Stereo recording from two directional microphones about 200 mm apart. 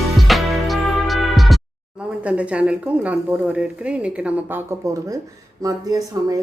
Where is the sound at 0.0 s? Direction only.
Centre (ahead or behind); by 5.2 s 15° right (ahead or behind).